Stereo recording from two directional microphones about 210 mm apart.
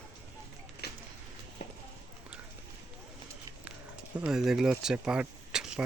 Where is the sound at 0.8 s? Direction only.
50° left (ahead or behind).